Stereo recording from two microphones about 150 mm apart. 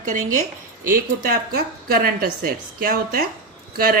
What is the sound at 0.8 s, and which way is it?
Speech, 75° right (ahead or behind).